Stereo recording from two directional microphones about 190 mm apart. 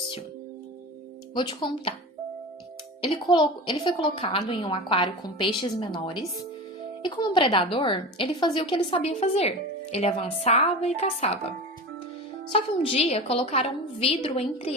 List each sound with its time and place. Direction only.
1.3 s a woman's voice: 25° left (ahead or behind)
3.0 s a woman's voice: 25° left (ahead or behind)